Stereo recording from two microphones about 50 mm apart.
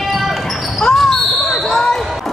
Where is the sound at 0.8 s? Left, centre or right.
Centre.